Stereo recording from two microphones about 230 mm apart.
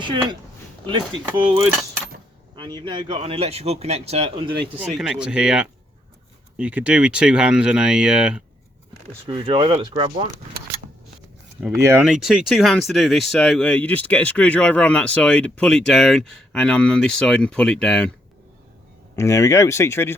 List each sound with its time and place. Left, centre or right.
0.0 s speech: centre
4.6 s speech: centre
9.2 s speech: right
11.8 s speech: centre
19.1 s speech: centre